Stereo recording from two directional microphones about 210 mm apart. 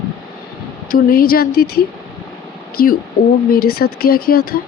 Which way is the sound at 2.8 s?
45° left (ahead or behind).